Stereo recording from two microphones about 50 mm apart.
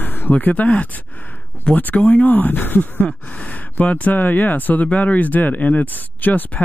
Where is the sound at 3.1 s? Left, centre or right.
Left.